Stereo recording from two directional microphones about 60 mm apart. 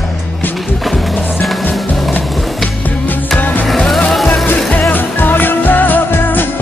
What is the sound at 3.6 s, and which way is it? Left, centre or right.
Music, centre.